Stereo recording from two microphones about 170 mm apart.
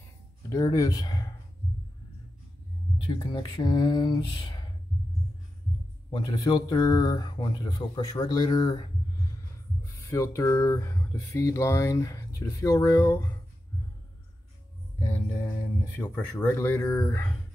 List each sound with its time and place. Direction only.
0.5 s speech: 20° left (ahead or behind)
3.2 s speech: 25° left (ahead or behind)
6.0 s speech: 25° left (ahead or behind)
10.0 s speech: 15° left (ahead or behind)
15.0 s music: 10° left (ahead or behind)
16.0 s speech: 10° left (ahead or behind)